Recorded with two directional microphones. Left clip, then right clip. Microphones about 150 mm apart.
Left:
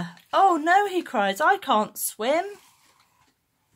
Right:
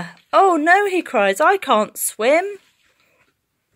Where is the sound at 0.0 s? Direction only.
30° right (ahead or behind).